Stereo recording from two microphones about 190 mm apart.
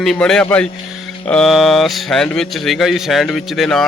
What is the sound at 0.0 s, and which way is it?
Speech, centre (ahead or behind).